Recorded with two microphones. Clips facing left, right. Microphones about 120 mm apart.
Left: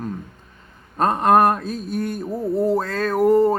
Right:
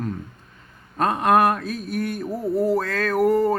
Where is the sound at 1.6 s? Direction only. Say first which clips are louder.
Left 1 dB; 25° left (ahead or behind).